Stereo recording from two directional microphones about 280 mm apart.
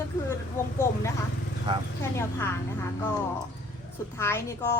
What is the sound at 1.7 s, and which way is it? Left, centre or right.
Speech, centre.